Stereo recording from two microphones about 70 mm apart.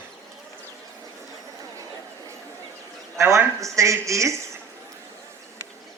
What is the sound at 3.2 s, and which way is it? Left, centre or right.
A woman's voice, right.